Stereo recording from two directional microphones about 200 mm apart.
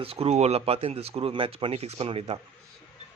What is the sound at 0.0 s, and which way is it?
Speech, 30° right (ahead or behind).